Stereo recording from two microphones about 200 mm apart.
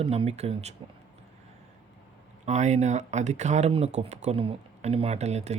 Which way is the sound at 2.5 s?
35° right (ahead or behind).